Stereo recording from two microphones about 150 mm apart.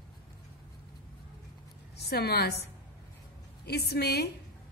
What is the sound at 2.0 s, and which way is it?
Speech, 90° left.